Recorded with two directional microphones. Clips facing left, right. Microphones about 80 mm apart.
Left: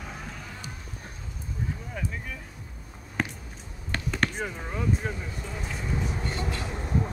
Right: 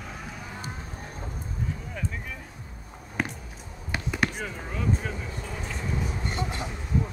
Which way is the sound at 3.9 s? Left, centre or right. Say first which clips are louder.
Even; centre.